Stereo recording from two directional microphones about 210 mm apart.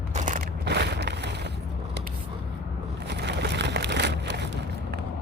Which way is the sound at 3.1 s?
55° right (ahead or behind).